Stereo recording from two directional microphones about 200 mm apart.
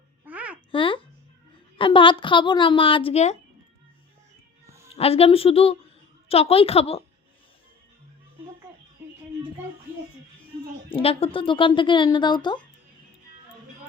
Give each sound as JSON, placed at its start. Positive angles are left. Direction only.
{"t": 0.3, "sound": "babbling", "side_deg": -5}
{"t": 0.7, "sound": "babbling", "side_deg": 25}
{"t": 1.8, "sound": "speech", "side_deg": 25}
{"t": 4.6, "sound": "music", "side_deg": -15}
{"t": 4.9, "sound": "speech", "side_deg": 30}
{"t": 10.8, "sound": "speech", "side_deg": 30}